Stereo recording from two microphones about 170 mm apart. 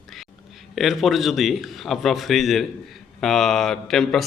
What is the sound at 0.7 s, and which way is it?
A man's voice, centre (ahead or behind).